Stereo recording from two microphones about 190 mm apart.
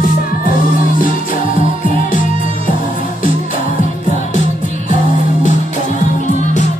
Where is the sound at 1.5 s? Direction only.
45° left (ahead or behind).